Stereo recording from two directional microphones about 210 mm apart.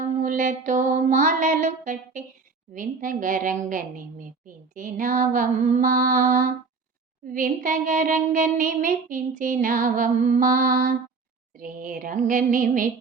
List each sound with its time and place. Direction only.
0.0 s a woman's voice: 35° right (ahead or behind)